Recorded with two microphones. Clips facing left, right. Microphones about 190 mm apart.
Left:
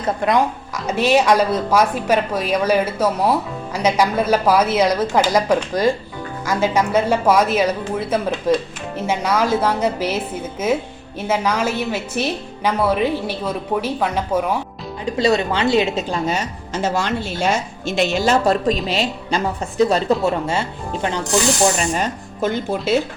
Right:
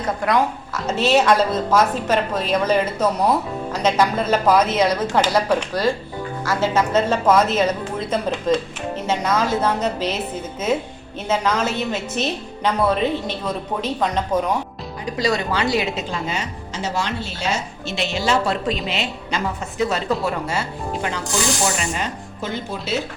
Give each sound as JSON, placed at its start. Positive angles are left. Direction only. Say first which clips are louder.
{"t": 0.9, "sound": "a woman's voice", "louder": "left 1 dB", "side_deg": 15}
{"t": 15.0, "sound": "speech", "louder": "left 4 dB", "side_deg": 25}
{"t": 16.1, "sound": "speech", "louder": "left 4 dB", "side_deg": 40}
{"t": 20.2, "sound": "speech", "louder": "left 4 dB", "side_deg": 25}
{"t": 21.8, "sound": "speech", "louder": "left 4 dB", "side_deg": 40}